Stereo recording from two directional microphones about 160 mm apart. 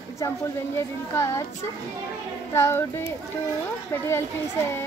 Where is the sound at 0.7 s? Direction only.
15° left (ahead or behind).